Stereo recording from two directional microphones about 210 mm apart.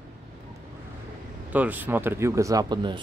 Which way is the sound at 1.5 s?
10° right (ahead or behind).